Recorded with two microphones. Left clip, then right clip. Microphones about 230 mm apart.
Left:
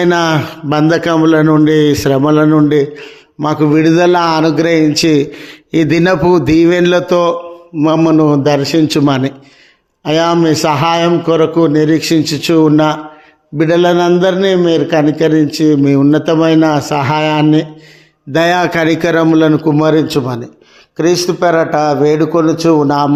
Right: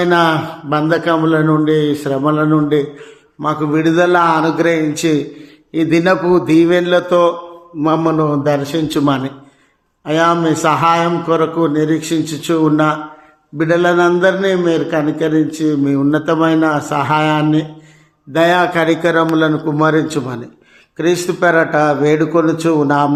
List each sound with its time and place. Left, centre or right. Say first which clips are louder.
0.0 s a man's voice: left 1 dB; left; by 23.0 s centre